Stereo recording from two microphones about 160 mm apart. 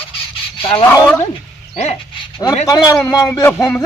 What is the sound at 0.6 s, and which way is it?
Speech, 35° left (ahead or behind).